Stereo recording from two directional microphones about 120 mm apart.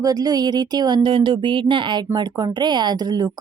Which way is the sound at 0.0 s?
30° right (ahead or behind).